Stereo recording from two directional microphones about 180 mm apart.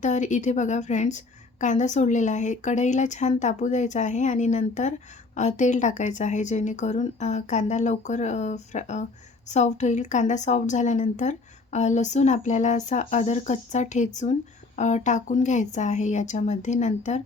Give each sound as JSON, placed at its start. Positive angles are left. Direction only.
{"t": 0.0, "sound": "a woman's voice", "side_deg": 40}